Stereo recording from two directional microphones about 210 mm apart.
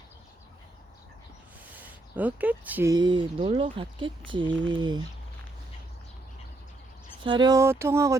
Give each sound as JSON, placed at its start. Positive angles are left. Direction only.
{"t": 1.7, "sound": "speech", "side_deg": -10}
{"t": 2.9, "sound": "speech", "side_deg": -20}
{"t": 7.3, "sound": "speech", "side_deg": -20}